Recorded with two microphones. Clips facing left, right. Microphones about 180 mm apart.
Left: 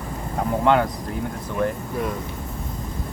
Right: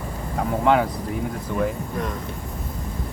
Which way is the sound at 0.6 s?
Centre (ahead or behind).